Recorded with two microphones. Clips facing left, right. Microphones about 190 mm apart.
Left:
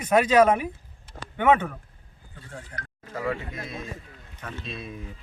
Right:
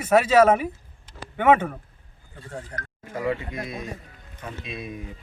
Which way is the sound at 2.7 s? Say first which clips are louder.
Right 4 dB; 40° right (ahead or behind).